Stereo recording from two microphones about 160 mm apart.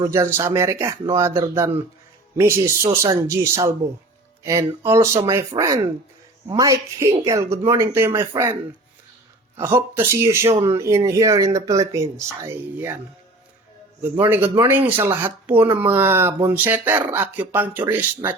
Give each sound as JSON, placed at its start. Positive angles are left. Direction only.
{"t": 0.0, "sound": "speech", "side_deg": -20}
{"t": 9.6, "sound": "speech", "side_deg": -15}
{"t": 14.0, "sound": "speech", "side_deg": -15}